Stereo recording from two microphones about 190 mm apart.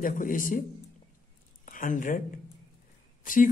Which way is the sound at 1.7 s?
45° left (ahead or behind).